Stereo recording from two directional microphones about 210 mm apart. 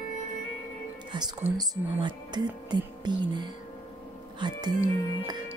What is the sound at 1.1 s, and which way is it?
Speech, 20° right (ahead or behind).